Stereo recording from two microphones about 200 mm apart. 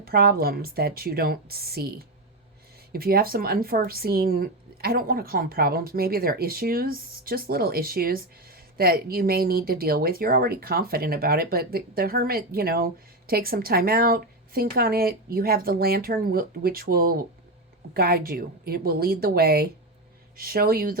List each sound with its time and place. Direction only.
0.0 s a woman's voice: 50° right (ahead or behind)